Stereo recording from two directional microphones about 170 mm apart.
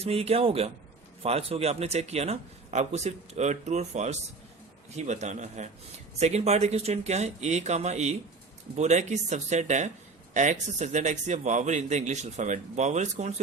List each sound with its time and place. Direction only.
0.0 s speech: 35° right (ahead or behind)